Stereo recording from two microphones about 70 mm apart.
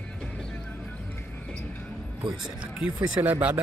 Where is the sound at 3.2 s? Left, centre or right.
Right.